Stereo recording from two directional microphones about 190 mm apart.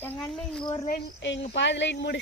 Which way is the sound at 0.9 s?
60° left (ahead or behind).